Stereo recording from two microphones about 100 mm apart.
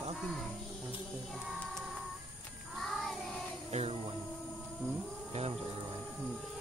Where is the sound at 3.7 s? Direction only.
85° right.